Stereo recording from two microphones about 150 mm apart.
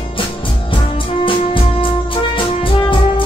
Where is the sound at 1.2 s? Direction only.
35° left (ahead or behind).